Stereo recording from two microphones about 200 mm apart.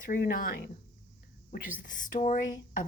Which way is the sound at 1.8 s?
40° left (ahead or behind).